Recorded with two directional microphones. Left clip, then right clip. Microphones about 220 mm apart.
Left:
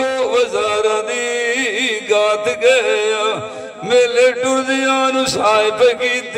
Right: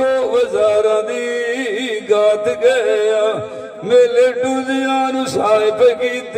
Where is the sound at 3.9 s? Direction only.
50° right (ahead or behind).